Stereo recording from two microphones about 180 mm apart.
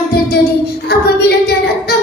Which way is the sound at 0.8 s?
60° left (ahead or behind).